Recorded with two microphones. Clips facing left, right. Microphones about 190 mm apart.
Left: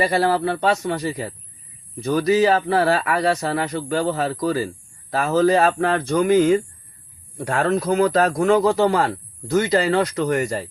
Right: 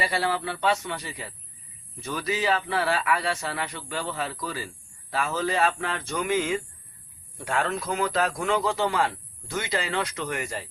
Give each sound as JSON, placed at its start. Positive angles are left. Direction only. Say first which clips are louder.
{"t": 0.0, "sound": "speech", "louder": "left 8 dB", "side_deg": 40}